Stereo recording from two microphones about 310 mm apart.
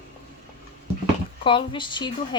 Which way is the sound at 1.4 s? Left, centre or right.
Centre.